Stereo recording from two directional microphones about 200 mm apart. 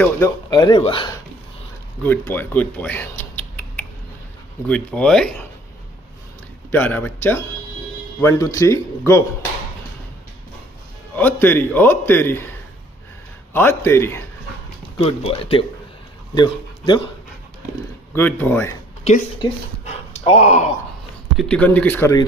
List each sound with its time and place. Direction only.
0.0 s speech: 15° left (ahead or behind)
2.0 s speech: 10° left (ahead or behind)
6.7 s a man's voice: 10° left (ahead or behind)
11.1 s a man's voice: 10° left (ahead or behind)
13.5 s a man's voice: 10° left (ahead or behind)
15.0 s speech: 30° left (ahead or behind)
18.1 s a man's voice: 10° left (ahead or behind)
19.9 s speech: 35° left (ahead or behind)
21.4 s a man's voice: 5° left (ahead or behind)